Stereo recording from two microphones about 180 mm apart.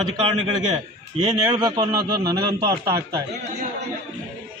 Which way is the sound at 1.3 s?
20° right (ahead or behind).